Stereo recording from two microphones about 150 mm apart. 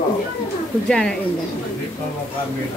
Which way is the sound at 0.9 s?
5° left (ahead or behind).